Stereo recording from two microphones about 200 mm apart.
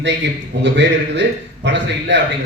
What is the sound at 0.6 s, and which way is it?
A man's voice, 60° right (ahead or behind).